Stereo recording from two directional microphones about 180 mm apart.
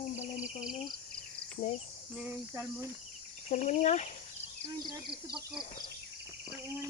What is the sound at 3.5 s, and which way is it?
Speech, 40° left (ahead or behind).